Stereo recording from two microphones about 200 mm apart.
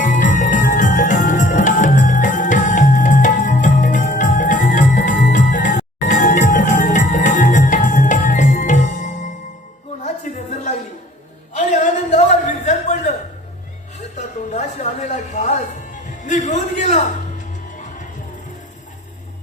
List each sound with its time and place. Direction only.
0.0 s music: 40° left (ahead or behind)
10.5 s a sound: 35° left (ahead or behind)
14.2 s music: 35° left (ahead or behind)